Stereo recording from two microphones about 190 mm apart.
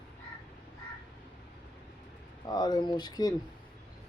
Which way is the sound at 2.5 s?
20° left (ahead or behind).